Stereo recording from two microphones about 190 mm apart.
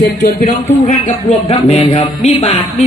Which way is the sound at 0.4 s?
40° left (ahead or behind).